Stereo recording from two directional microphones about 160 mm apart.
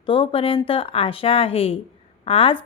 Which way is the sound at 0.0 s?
35° left (ahead or behind).